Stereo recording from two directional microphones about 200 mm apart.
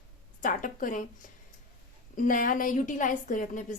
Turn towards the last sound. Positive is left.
turn(degrees=40)  # may be behind; listen again after turning